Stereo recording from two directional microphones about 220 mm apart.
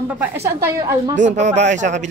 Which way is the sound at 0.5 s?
10° right (ahead or behind).